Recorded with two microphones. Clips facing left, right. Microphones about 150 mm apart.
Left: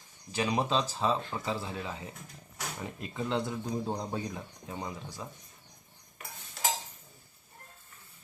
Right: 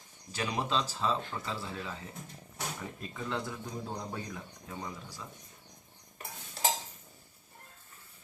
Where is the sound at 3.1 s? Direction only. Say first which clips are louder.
Left 5 dB; 25° left (ahead or behind).